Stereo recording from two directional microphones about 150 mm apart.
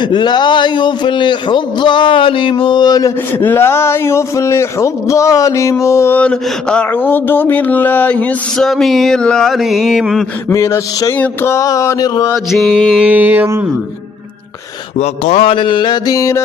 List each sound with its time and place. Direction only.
0.0 s a man's voice: 30° left (ahead or behind)
3.4 s speech: 15° left (ahead or behind); by 10.2 s centre (ahead or behind)
10.5 s mantra: 20° left (ahead or behind)
12.5 s music: centre (ahead or behind)
14.9 s a man's voice: 50° left (ahead or behind); by 16.4 s 20° left (ahead or behind)